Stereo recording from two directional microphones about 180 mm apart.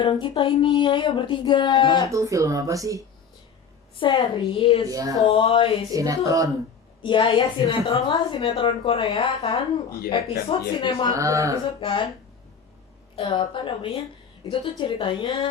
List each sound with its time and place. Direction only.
0.0 s a woman's voice: 25° left (ahead or behind)
2.1 s speech: 15° right (ahead or behind)
4.0 s a woman's voice: 25° left (ahead or behind)
4.9 s speech: 20° right (ahead or behind)
5.3 s a woman's voice: 30° left (ahead or behind)
5.9 s speech: 20° right (ahead or behind)
7.0 s a woman's voice: 25° left (ahead or behind)
11.1 s speech: 15° right (ahead or behind)
11.8 s a woman's voice: 30° left (ahead or behind)
13.1 s a woman's voice: 30° left (ahead or behind)